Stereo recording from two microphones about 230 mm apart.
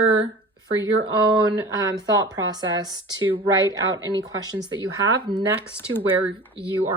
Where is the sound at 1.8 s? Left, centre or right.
Centre.